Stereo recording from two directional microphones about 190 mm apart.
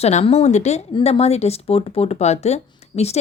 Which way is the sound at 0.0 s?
35° left (ahead or behind).